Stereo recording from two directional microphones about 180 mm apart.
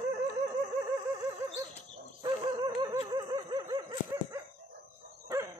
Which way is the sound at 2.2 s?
25° right (ahead or behind).